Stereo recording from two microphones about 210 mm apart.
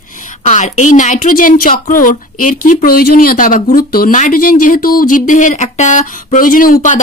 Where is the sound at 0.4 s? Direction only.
35° left (ahead or behind).